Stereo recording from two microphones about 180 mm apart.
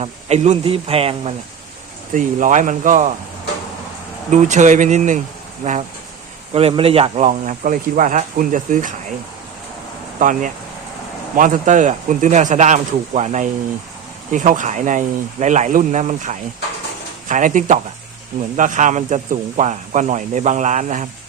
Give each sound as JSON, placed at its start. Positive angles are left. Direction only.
{"t": 0.0, "sound": "speech", "side_deg": -35}
{"t": 2.1, "sound": "speech", "side_deg": -45}
{"t": 4.3, "sound": "speech", "side_deg": -40}
{"t": 6.5, "sound": "speech", "side_deg": -35}
{"t": 10.2, "sound": "speech", "side_deg": -45}